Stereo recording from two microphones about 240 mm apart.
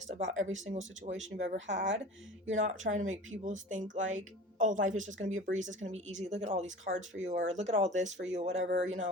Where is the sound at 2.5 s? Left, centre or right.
Right.